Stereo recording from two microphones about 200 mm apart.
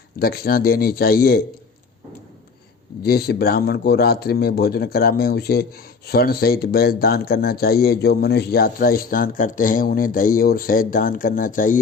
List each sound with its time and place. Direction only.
0.2 s speech: 50° left (ahead or behind)
3.0 s speech: 50° left (ahead or behind)